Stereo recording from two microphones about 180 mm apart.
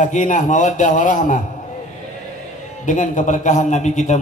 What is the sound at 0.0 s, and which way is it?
A man's voice, 45° left (ahead or behind).